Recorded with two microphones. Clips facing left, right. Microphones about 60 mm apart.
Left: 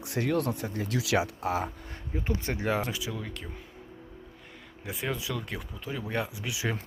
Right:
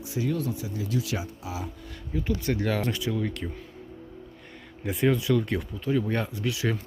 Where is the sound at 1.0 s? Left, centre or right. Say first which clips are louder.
Left 8 dB; left.